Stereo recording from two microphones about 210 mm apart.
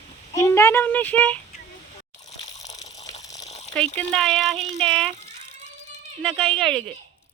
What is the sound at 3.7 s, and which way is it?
Speech, 5° left (ahead or behind).